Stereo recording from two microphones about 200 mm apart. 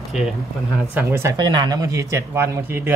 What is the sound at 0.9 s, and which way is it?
A man's voice, 10° right (ahead or behind).